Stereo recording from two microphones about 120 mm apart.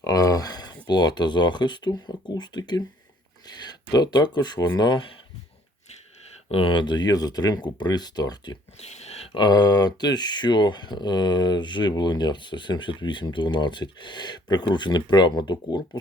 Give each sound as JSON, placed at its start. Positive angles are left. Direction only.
{"t": 0.0, "sound": "speech", "side_deg": 30}
{"t": 6.5, "sound": "speech", "side_deg": 50}
{"t": 8.8, "sound": "a sound", "side_deg": 65}
{"t": 9.4, "sound": "speech", "side_deg": 35}